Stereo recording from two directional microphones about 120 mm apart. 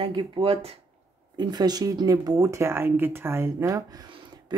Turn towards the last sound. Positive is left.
turn(degrees=-40)  # may be behind; listen again after turning